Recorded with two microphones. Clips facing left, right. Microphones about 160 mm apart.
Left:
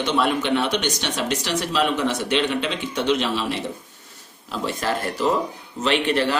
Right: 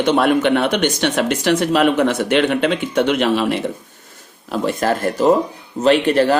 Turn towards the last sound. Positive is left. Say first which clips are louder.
# right 7 dB
turn(degrees=-45)  # may be behind; listen again after turning